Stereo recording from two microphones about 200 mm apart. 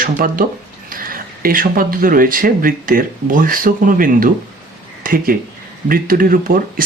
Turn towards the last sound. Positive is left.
turn(degrees=-45)  # may be behind; listen again after turning